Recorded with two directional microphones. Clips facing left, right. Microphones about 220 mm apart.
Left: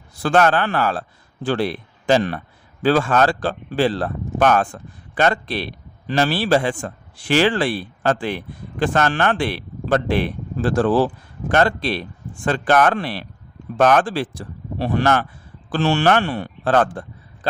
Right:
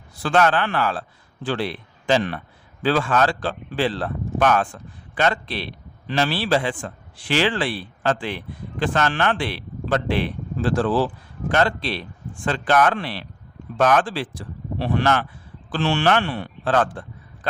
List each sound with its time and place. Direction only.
0.2 s a man's voice: 45° left (ahead or behind)